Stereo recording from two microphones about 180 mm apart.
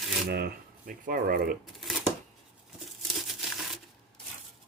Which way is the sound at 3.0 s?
Centre (ahead or behind).